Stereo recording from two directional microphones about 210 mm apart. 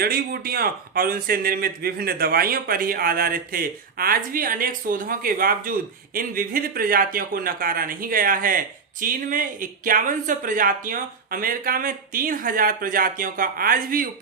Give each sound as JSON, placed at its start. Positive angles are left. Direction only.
{"t": 0.0, "sound": "speech", "side_deg": -45}